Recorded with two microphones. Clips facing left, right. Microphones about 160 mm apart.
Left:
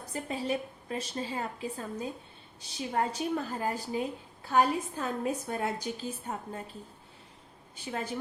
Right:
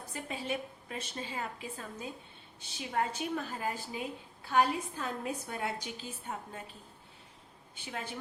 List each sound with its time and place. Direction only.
0.1 s a woman's voice: 40° left (ahead or behind)
7.9 s a woman's voice: 40° left (ahead or behind)